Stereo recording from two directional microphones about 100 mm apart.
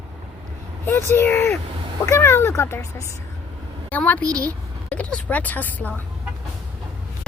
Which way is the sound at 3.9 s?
15° left (ahead or behind).